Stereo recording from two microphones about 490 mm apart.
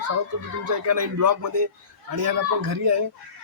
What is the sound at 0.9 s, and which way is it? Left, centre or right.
Speech, right.